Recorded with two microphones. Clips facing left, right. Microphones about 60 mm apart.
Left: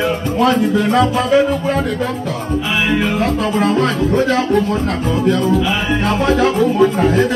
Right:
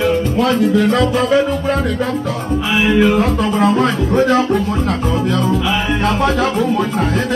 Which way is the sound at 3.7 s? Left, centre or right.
Right.